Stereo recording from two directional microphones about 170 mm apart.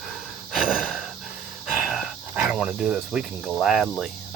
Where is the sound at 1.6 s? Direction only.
5° right (ahead or behind).